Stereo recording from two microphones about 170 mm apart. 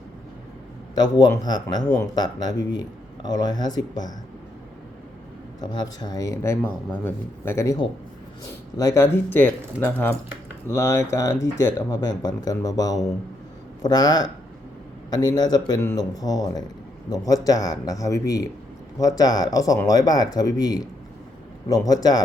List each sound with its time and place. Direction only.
0.9 s speech: 25° left (ahead or behind)
5.5 s speech: 25° left (ahead or behind)
8.8 s speech: 15° left (ahead or behind)
21.8 s speech: 20° left (ahead or behind)